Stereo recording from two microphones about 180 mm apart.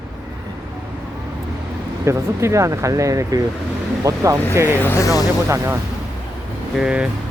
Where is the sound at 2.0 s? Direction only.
15° right (ahead or behind).